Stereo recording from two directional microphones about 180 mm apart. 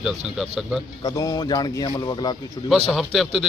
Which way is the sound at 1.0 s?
20° left (ahead or behind).